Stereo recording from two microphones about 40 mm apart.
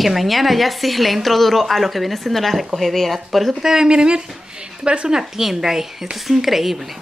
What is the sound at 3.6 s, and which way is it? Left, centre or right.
Speech, centre.